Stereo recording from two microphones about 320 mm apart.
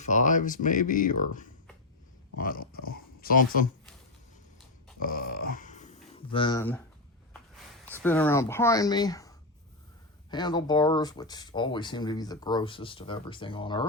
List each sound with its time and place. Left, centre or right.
0.1 s speech: left
5.0 s a sound: left; by 6.7 s centre
8.0 s speech: centre
10.3 s speech: centre